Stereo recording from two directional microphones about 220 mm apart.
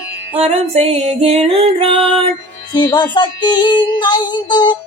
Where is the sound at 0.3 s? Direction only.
30° right (ahead or behind).